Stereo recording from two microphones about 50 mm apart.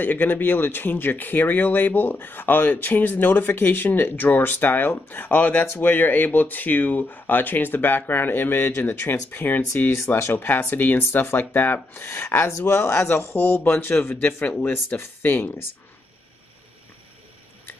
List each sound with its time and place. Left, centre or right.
0.0 s speech: left
9.9 s speech: left
10.3 s speech: left
13.3 s speech: left
13.7 s speech: left
14.6 s speech: left